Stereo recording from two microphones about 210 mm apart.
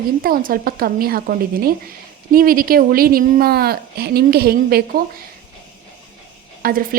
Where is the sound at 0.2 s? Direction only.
45° right (ahead or behind).